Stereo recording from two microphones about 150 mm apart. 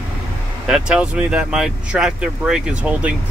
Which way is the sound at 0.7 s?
5° right (ahead or behind).